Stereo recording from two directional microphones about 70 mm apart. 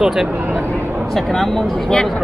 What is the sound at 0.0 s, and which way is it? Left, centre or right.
Speech, centre.